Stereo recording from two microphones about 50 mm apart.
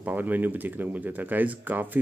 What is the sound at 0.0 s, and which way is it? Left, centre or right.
Speech, right.